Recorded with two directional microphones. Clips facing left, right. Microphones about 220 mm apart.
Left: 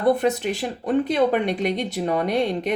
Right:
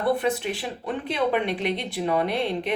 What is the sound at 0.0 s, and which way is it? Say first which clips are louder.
Speech: left 4 dB; 40° left (ahead or behind).